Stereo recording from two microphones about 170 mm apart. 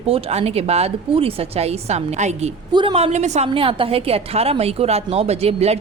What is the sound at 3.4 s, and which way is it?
A woman's voice, 30° right (ahead or behind).